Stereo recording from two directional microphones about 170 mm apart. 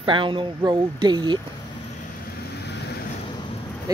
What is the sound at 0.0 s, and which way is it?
Speech, 30° right (ahead or behind).